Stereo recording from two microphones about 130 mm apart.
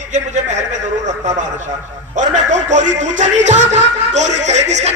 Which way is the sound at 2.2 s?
65° right (ahead or behind).